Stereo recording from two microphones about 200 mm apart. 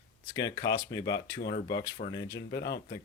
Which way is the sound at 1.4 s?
55° left (ahead or behind).